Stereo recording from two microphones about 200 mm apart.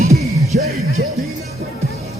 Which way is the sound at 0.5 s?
50° right (ahead or behind).